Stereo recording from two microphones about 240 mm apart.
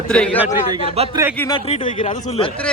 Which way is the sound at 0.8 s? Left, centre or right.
Right.